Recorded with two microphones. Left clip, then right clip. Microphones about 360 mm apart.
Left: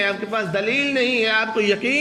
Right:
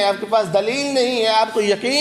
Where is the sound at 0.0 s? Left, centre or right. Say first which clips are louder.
Right 5 dB; centre.